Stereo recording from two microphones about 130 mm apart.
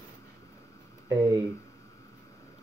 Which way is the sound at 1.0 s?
25° right (ahead or behind).